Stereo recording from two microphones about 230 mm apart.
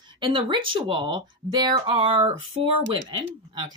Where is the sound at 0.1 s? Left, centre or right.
Centre.